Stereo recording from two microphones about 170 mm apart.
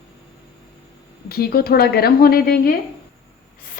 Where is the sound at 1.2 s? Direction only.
65° left (ahead or behind).